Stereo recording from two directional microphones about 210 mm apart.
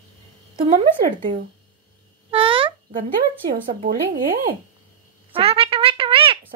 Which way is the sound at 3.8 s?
45° right (ahead or behind).